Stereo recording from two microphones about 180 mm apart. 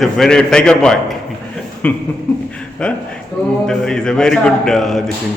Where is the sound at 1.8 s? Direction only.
5° left (ahead or behind).